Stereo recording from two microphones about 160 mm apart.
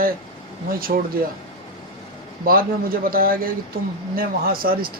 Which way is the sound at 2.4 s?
65° right (ahead or behind).